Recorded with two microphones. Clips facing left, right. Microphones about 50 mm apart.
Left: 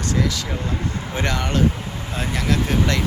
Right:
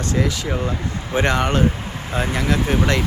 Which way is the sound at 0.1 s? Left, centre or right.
Right.